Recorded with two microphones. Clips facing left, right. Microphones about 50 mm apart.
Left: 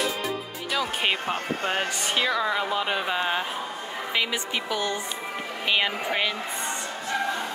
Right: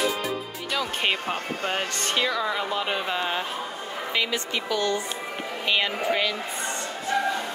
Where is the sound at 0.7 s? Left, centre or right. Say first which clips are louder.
Even; centre.